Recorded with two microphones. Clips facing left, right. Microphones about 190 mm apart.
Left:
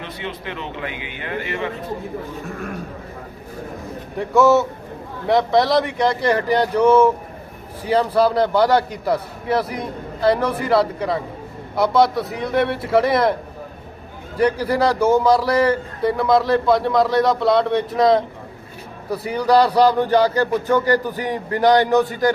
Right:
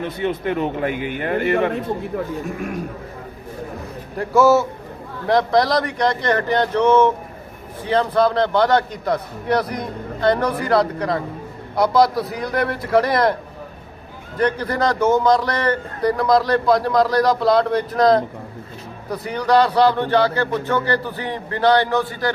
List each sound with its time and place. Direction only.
0.0 s speech: 45° right (ahead or behind)
4.2 s a man's voice: centre (ahead or behind)
14.3 s a man's voice: 10° left (ahead or behind)